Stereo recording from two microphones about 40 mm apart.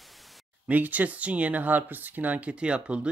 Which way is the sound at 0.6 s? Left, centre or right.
Right.